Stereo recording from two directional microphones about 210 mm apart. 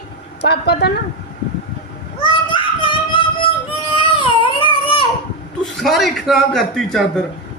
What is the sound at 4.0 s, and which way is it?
Baby cry, 25° left (ahead or behind).